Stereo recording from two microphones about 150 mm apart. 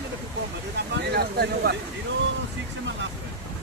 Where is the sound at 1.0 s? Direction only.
90° right.